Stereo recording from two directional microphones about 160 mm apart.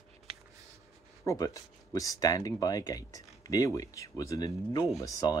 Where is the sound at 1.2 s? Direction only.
20° left (ahead or behind).